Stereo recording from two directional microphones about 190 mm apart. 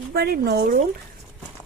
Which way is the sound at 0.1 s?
60° right (ahead or behind).